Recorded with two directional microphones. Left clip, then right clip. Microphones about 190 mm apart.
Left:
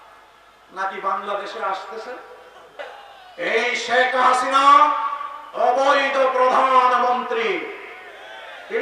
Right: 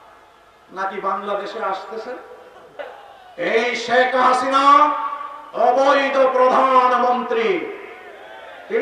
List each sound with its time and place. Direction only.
0.8 s a man's voice: 10° right (ahead or behind)
3.3 s a man's voice: 10° right (ahead or behind)